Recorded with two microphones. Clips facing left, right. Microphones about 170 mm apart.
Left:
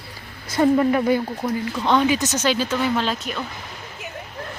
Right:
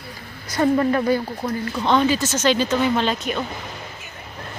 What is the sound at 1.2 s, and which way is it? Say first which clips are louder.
Speech: left 1 dB; 5° right (ahead or behind).